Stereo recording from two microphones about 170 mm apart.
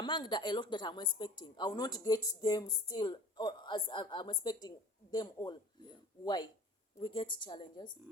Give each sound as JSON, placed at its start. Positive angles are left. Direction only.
{"t": 0.0, "sound": "a woman's voice", "side_deg": 25}